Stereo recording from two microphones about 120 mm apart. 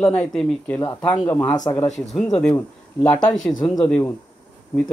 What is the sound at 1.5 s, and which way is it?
Speech, 35° left (ahead or behind).